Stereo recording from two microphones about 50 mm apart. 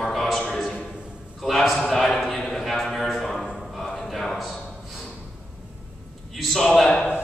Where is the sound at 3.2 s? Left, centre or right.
Centre.